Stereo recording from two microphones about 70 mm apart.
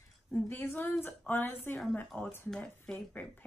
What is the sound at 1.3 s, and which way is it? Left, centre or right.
Speech, left.